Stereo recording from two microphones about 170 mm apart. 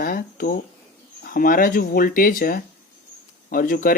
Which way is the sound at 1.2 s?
55° left (ahead or behind).